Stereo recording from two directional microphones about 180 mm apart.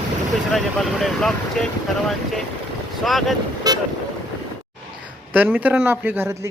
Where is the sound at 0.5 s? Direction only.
Centre (ahead or behind).